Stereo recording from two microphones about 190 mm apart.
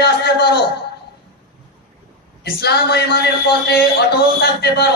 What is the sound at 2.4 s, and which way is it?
Speech, 60° left (ahead or behind).